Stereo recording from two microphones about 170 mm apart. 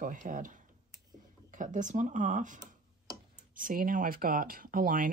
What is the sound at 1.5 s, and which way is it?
Speech, 45° right (ahead or behind).